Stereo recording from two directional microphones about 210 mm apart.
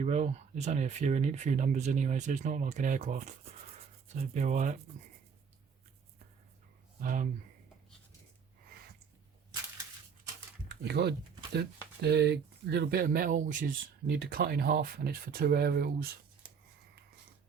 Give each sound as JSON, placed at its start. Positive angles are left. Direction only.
{"t": 0.0, "sound": "speech", "side_deg": -35}
{"t": 7.0, "sound": "speech", "side_deg": -40}
{"t": 10.8, "sound": "speech", "side_deg": -50}
{"t": 14.1, "sound": "speech", "side_deg": -50}